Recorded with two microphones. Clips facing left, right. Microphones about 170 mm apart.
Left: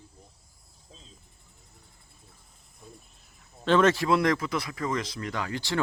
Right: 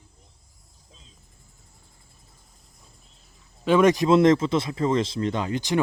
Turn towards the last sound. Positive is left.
turn(degrees=-20)  # may be behind; listen again after turning